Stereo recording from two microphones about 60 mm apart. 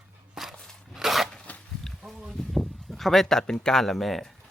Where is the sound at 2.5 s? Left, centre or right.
Centre.